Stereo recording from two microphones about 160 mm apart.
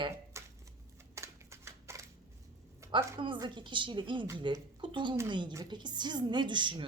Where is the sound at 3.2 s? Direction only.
30° right (ahead or behind).